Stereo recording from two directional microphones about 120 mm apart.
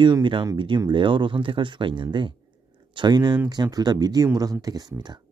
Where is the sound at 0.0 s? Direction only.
40° right (ahead or behind).